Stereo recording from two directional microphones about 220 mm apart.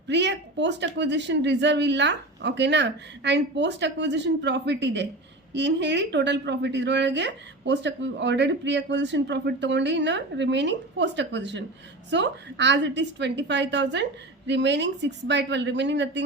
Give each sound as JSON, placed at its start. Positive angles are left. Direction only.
{"t": 0.1, "sound": "a woman's voice", "side_deg": -50}